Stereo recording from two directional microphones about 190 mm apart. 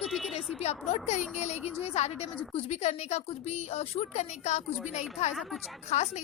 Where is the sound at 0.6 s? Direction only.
35° left (ahead or behind).